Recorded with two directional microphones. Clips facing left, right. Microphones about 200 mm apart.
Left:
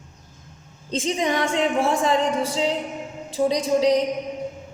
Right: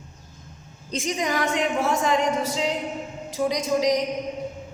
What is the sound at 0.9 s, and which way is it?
A woman's voice, 25° left (ahead or behind).